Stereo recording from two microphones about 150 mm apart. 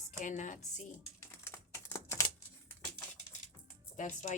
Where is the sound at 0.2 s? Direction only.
55° left (ahead or behind).